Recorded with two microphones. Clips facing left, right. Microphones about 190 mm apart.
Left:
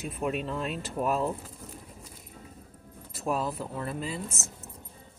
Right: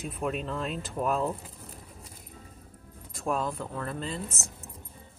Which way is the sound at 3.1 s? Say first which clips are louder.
Even; 5° left (ahead or behind).